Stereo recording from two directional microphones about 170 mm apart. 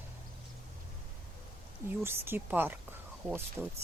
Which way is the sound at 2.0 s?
15° right (ahead or behind).